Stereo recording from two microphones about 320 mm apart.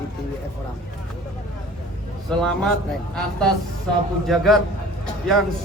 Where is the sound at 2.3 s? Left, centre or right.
Centre.